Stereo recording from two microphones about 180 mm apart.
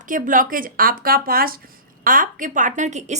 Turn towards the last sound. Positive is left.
turn(degrees=-40)  # may be behind; listen again after turning